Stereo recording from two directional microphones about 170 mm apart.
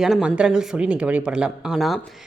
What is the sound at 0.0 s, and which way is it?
Speech, 5° right (ahead or behind).